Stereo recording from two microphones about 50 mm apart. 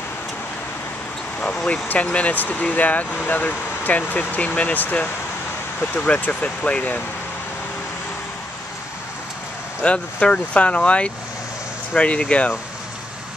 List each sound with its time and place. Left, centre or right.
2.0 s speech: left
4.8 s speech: left
9.8 s speech: left